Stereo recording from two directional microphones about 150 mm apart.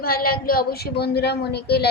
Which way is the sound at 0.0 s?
85° left.